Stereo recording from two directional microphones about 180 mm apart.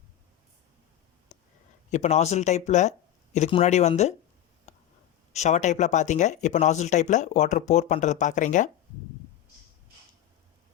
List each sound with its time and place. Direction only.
1.3 s a sound: 40° left (ahead or behind)
1.9 s speech: 40° left (ahead or behind)
5.3 s speech: 40° left (ahead or behind)